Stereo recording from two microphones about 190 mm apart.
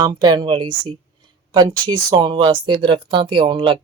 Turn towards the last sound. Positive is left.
turn(degrees=-25)  # may be behind; listen again after turning